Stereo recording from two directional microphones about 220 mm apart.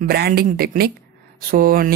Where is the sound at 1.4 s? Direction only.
40° right (ahead or behind).